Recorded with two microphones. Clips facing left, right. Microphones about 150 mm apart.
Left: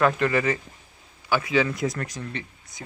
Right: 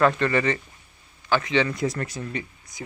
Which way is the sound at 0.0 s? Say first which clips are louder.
Right 1 dB; 5° left (ahead or behind).